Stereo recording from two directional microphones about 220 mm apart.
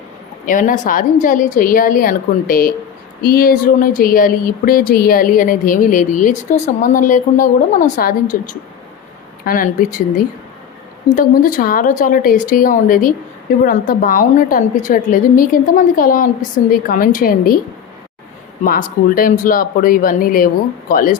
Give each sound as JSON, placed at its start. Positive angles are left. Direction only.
{"t": 0.4, "sound": "speech", "side_deg": 35}
{"t": 9.4, "sound": "speech", "side_deg": 40}
{"t": 11.1, "sound": "speech", "side_deg": 40}
{"t": 18.6, "sound": "speech", "side_deg": 40}